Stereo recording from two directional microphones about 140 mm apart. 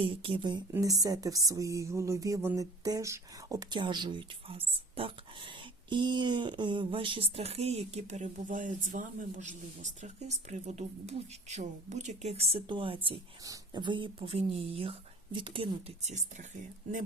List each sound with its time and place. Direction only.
0.0 s speech: 40° right (ahead or behind)
0.7 s speech: 25° right (ahead or behind); by 13.1 s 40° right (ahead or behind)
13.4 s speech: 30° right (ahead or behind)
16.0 s speech: 60° right (ahead or behind)